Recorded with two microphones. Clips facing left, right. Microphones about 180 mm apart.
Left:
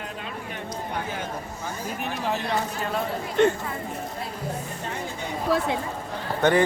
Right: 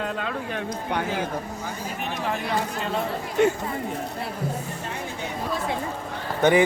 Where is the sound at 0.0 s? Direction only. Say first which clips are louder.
Right 6 dB; 90° right.